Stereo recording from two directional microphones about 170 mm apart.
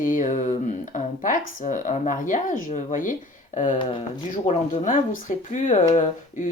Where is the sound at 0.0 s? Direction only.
50° left (ahead or behind).